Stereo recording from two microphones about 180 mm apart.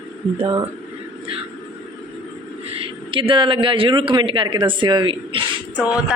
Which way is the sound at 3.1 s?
30° right (ahead or behind).